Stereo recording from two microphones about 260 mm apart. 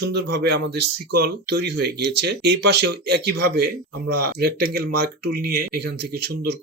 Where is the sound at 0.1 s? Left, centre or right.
Right.